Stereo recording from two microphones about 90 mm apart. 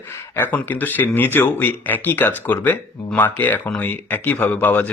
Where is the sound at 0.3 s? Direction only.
20° left (ahead or behind).